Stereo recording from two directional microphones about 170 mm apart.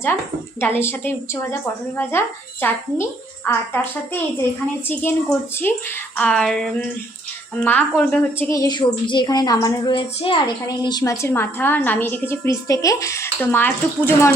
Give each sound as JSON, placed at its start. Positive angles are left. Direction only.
{"t": 0.6, "sound": "a woman's voice", "side_deg": 15}